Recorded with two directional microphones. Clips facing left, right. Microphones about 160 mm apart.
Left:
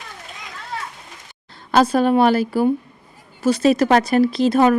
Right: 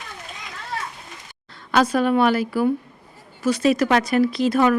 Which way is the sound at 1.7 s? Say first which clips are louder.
Left 3 dB; 30° left (ahead or behind).